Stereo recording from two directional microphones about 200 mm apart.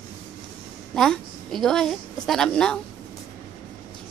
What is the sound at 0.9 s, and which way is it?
A woman's voice, centre (ahead or behind).